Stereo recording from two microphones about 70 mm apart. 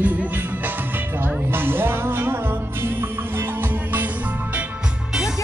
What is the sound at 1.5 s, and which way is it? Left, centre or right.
Music, right.